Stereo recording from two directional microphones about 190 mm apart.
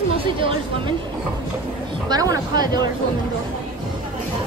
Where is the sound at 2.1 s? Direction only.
20° right (ahead or behind).